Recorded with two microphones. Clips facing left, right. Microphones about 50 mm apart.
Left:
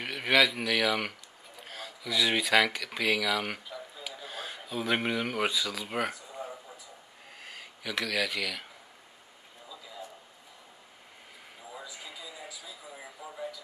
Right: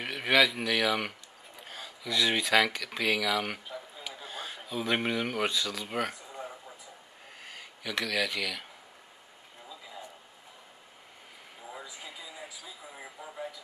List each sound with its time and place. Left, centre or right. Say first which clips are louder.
0.0 s speech: even; centre
7.4 s speech: even; centre
11.7 s a sound: even; centre